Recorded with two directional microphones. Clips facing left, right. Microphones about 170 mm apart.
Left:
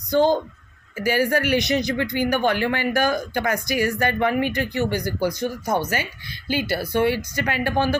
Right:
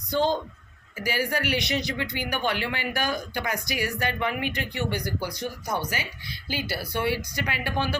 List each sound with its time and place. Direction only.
0.1 s speech: 45° left (ahead or behind)